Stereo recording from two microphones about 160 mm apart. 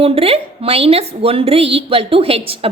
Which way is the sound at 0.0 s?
35° right (ahead or behind).